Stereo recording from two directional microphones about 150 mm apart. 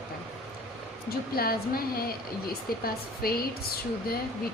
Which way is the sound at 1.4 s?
80° left.